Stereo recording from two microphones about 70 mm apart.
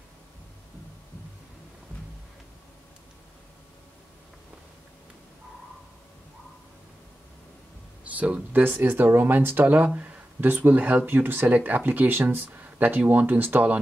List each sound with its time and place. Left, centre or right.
8.0 s speech: right
8.6 s speech: right